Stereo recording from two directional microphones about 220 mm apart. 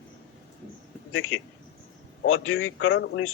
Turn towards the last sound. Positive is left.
turn(degrees=60)  # may be behind; listen again after turning